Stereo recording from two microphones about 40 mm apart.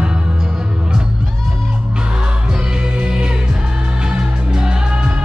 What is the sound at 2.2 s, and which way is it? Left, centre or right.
Music, right.